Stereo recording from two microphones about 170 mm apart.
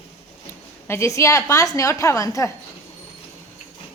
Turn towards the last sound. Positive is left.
turn(degrees=20)  # may be behind; listen again after turning